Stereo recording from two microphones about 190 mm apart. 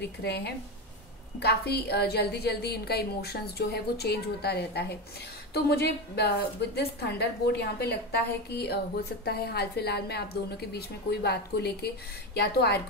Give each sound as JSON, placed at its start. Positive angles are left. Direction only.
{"t": 0.0, "sound": "a woman's voice", "side_deg": 60}